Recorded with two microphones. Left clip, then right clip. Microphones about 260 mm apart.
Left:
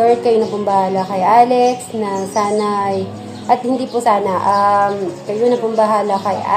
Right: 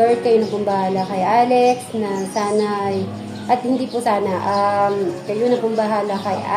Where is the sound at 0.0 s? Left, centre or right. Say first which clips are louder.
Left 2 dB; left.